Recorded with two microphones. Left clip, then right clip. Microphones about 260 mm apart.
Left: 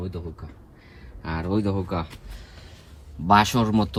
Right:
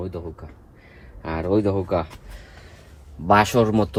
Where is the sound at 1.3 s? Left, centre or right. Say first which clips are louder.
Right 5 dB; centre.